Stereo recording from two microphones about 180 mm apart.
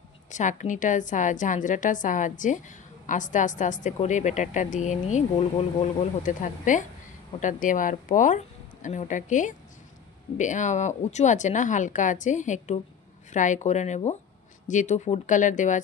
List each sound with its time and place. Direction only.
0.3 s a woman's voice: 45° left (ahead or behind)